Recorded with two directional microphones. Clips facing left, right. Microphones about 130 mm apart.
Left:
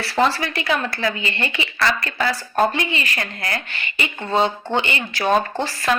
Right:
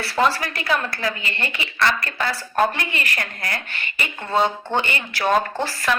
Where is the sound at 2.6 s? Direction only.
25° left (ahead or behind).